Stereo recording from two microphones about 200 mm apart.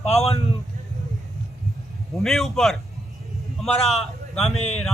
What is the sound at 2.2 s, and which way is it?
A man's voice, centre (ahead or behind).